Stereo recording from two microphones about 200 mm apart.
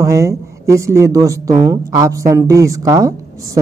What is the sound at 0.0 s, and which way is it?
A woman's voice, 15° right (ahead or behind).